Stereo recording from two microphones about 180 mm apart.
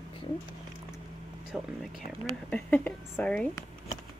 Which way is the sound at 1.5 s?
Centre (ahead or behind).